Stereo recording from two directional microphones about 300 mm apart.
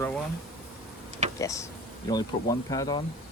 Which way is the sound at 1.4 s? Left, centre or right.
Centre.